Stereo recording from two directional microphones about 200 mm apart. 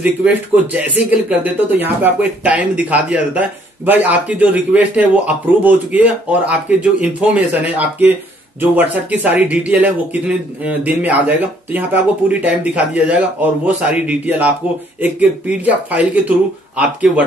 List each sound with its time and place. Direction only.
0.0 s speech: 5° right (ahead or behind)